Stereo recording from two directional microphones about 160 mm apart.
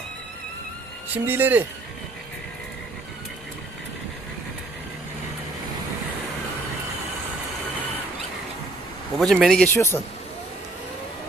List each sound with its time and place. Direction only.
1.1 s speech: 10° right (ahead or behind)
9.1 s a man's voice: centre (ahead or behind)